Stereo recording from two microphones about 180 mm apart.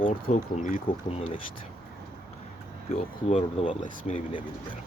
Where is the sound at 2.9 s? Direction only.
35° left (ahead or behind).